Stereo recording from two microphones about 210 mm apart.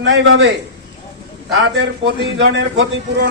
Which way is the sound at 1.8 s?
60° right (ahead or behind).